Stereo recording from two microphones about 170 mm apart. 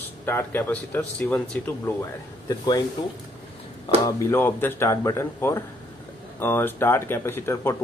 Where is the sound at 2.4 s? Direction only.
20° left (ahead or behind).